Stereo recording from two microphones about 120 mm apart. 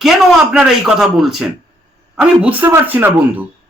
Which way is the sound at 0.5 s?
5° right (ahead or behind).